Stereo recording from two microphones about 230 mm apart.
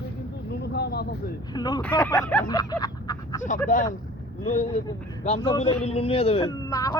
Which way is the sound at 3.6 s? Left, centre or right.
Left.